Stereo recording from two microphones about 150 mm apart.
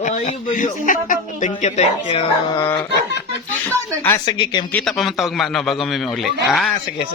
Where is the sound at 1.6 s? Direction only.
50° left (ahead or behind).